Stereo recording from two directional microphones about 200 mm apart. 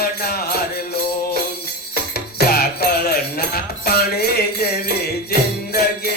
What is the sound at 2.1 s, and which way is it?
Music, 50° left (ahead or behind).